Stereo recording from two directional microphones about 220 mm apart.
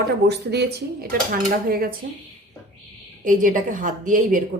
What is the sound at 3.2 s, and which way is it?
A woman's voice, 35° right (ahead or behind).